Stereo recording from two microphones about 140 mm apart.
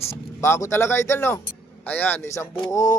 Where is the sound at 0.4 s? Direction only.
20° left (ahead or behind).